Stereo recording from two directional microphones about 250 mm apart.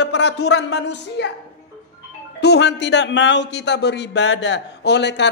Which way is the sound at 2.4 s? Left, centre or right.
Left.